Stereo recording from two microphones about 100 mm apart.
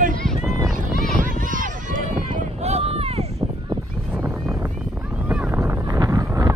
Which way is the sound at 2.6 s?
85° right.